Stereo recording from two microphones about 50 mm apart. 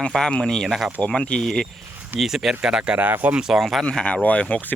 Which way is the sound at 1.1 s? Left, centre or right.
Centre.